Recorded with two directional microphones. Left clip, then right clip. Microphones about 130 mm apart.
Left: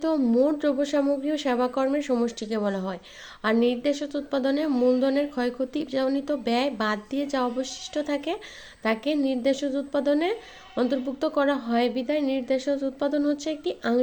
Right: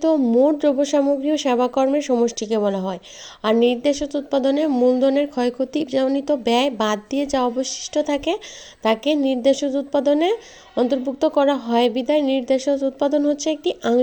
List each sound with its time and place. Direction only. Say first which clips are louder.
0.0 s a woman's voice: right 6 dB; 35° right (ahead or behind)